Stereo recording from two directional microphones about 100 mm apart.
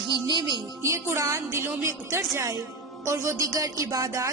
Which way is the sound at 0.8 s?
30° right (ahead or behind).